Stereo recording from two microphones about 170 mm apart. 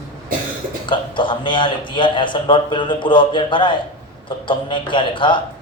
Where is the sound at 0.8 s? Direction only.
30° left (ahead or behind).